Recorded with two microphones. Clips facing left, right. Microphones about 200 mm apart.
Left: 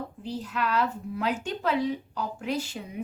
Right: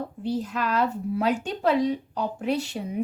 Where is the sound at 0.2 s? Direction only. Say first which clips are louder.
Right 4 dB; 40° right (ahead or behind).